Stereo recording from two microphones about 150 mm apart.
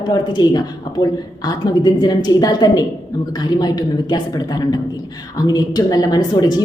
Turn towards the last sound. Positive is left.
turn(degrees=30)  # may be behind; listen again after turning